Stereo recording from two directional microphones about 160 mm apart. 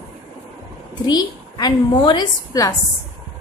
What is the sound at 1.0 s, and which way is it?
A woman's voice, 25° left (ahead or behind).